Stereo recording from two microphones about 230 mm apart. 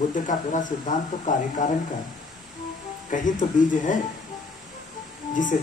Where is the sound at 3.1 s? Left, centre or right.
Left.